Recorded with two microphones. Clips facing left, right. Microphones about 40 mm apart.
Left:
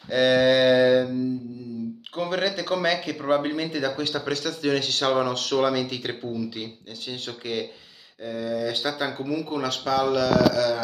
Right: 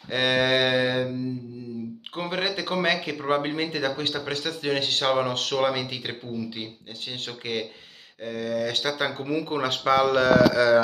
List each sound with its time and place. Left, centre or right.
0.1 s mantra: right
2.1 s a man's voice: right
6.0 s speech: centre
7.1 s speech: right
8.2 s speech: right
8.9 s speech: right